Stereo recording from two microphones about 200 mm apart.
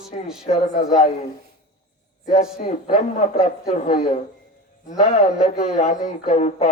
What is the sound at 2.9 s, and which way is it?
A man's voice, 35° left (ahead or behind).